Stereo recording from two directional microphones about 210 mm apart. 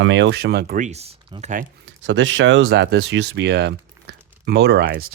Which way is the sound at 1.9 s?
60° right (ahead or behind).